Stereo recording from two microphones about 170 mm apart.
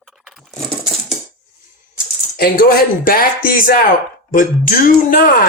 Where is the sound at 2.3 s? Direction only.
60° left (ahead or behind).